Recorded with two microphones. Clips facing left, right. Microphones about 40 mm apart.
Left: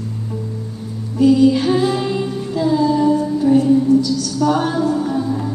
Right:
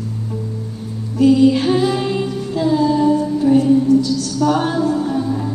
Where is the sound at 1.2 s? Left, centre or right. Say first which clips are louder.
Even; right.